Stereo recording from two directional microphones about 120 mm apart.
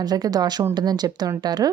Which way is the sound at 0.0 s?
35° right (ahead or behind).